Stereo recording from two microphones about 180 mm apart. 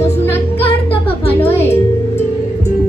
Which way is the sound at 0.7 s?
30° left (ahead or behind).